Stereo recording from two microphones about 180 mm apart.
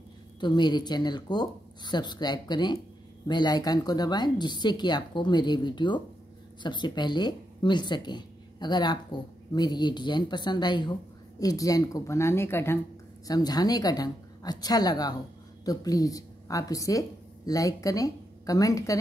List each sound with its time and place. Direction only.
0.4 s a woman's voice: 25° left (ahead or behind)